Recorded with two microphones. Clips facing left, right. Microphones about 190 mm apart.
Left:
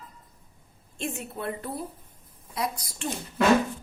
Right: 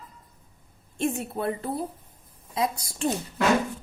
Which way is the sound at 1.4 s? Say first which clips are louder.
Right 2 dB; 30° right (ahead or behind).